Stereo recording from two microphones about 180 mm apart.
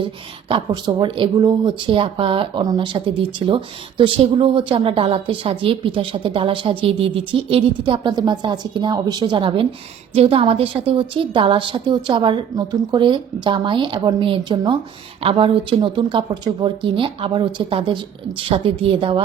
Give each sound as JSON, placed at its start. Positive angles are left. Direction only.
{"t": 0.0, "sound": "speech", "side_deg": -30}